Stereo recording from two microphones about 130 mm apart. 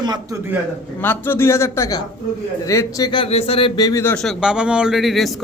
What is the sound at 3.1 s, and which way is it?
Speech, 45° left (ahead or behind).